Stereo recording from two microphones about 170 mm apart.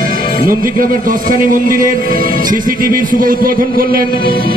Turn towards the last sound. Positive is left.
turn(degrees=-60)  # may be behind; listen again after turning